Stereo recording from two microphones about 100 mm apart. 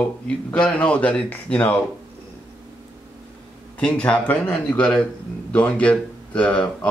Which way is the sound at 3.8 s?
10° left (ahead or behind).